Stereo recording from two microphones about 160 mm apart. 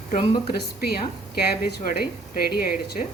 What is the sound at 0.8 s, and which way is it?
A woman's voice, 80° left.